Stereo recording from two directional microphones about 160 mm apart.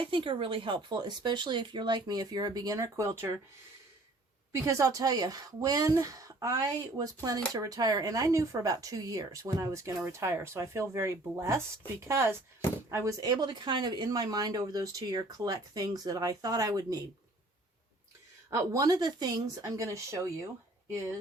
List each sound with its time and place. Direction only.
0.0 s speech: 30° right (ahead or behind)
4.5 s speech: 20° right (ahead or behind)
18.5 s speech: 20° right (ahead or behind)